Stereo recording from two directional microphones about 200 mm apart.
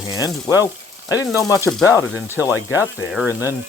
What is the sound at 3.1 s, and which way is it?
Speech, 5° right (ahead or behind).